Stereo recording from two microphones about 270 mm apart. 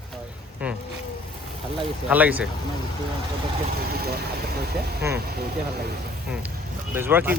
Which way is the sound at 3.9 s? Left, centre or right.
Right.